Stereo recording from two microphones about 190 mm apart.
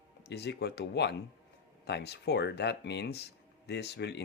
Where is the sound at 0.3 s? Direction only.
60° left (ahead or behind).